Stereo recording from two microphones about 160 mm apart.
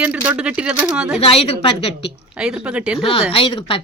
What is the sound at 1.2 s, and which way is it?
Speech, 35° left (ahead or behind).